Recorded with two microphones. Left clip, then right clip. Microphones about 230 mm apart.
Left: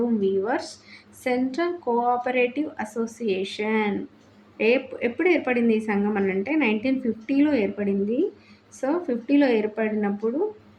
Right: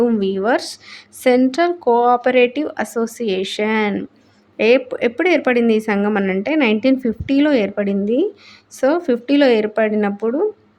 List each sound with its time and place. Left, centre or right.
0.2 s a woman's voice: right